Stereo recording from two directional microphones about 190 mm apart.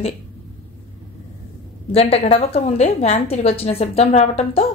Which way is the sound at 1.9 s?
30° left (ahead or behind).